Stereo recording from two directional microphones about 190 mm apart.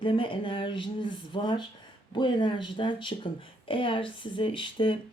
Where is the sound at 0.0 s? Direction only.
25° left (ahead or behind).